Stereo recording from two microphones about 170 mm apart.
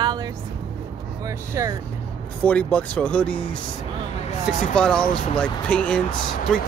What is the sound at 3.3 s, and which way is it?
Speech, 30° left (ahead or behind).